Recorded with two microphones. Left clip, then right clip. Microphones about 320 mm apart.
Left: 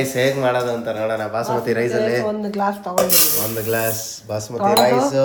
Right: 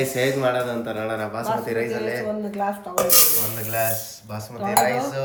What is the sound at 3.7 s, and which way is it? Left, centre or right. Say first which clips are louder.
Cutlery: left 1 dB; centre.